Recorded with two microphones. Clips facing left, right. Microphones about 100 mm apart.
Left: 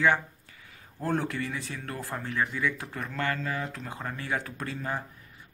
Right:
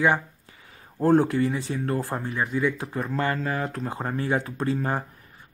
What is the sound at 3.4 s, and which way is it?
A man's voice, 45° right (ahead or behind).